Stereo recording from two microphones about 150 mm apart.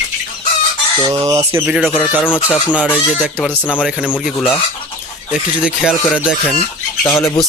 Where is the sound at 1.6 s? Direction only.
5° right (ahead or behind).